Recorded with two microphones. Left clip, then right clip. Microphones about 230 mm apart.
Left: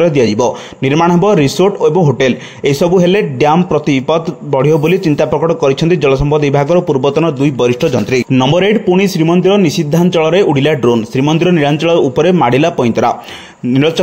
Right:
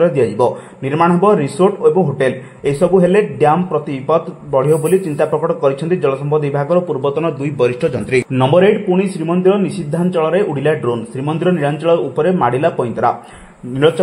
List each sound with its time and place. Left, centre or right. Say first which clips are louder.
0.0 s a man's voice: left 3 dB; left